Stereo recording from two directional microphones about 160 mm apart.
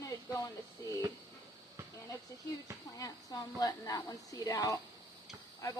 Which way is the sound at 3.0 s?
20° left (ahead or behind).